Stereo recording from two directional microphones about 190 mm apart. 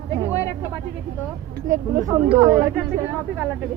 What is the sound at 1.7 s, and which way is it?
Speech, 15° right (ahead or behind).